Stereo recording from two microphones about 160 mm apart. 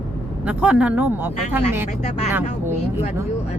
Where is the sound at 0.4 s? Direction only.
5° right (ahead or behind).